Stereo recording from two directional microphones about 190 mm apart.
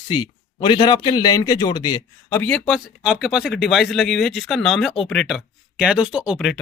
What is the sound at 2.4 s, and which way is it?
Speech, centre (ahead or behind).